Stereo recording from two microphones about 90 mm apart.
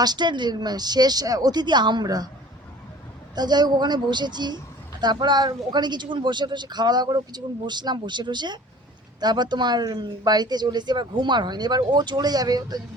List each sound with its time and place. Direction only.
0.0 s speech: 55° right (ahead or behind)
3.3 s speech: 50° right (ahead or behind)